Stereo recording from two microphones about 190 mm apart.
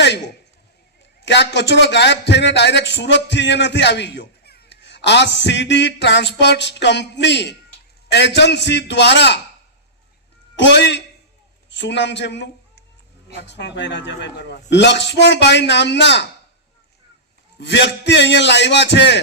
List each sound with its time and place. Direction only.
1.2 s a man's voice: 65° left (ahead or behind)
10.6 s a man's voice: 65° left (ahead or behind)
17.6 s a man's voice: 65° left (ahead or behind)